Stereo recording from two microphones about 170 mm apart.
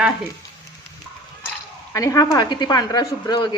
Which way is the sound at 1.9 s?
20° left (ahead or behind).